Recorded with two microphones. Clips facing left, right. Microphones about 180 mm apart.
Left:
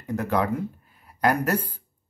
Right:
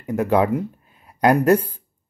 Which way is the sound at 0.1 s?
20° right (ahead or behind).